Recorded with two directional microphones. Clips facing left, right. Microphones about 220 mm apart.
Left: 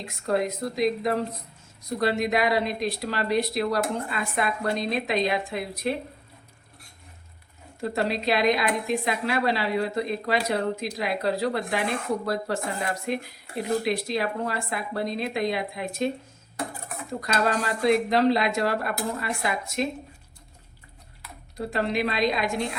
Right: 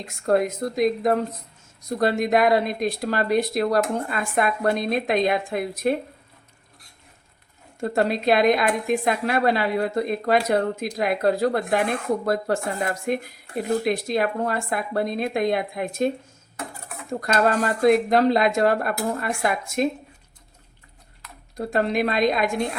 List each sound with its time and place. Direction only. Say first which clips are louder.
0.3 s a woman's voice: right 4 dB; 50° right (ahead or behind)
7.8 s a woman's voice: right 4 dB; 50° right (ahead or behind)
17.2 s a woman's voice: right 5 dB; 50° right (ahead or behind)
21.5 s a woman's voice: right 4 dB; 50° right (ahead or behind)